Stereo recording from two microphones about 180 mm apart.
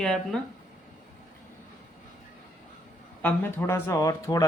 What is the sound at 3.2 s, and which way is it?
Speech, 10° left (ahead or behind).